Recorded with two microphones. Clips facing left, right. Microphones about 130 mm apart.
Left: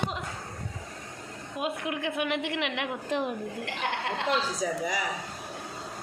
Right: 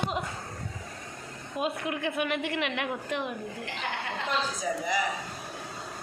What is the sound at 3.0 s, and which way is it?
Speech, 35° left (ahead or behind).